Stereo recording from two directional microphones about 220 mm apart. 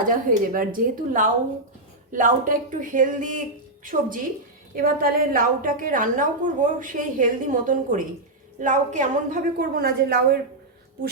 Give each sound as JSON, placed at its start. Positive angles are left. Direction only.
{"t": 0.0, "sound": "a woman's voice", "side_deg": -40}